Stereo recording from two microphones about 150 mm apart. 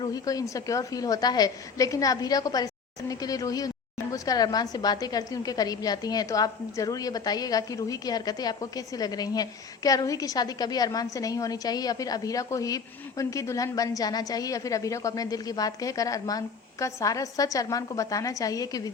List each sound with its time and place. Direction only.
0.0 s a woman's voice: 25° left (ahead or behind)